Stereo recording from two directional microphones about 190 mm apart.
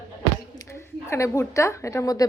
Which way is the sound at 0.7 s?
15° left (ahead or behind).